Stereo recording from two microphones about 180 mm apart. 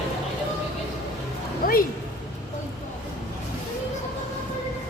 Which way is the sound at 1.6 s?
50° left (ahead or behind).